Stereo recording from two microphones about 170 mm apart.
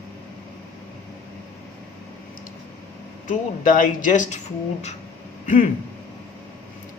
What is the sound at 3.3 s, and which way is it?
Speech, 50° left (ahead or behind).